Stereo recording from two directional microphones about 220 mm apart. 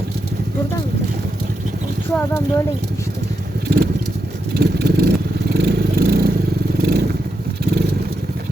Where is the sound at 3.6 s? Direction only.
45° right (ahead or behind).